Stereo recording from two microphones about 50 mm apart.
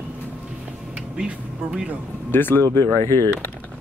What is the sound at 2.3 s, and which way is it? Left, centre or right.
Speech, left.